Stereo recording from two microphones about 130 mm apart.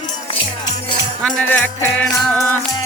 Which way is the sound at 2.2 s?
Centre (ahead or behind).